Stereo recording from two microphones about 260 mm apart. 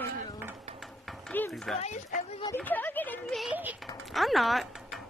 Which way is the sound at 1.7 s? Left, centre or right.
Left.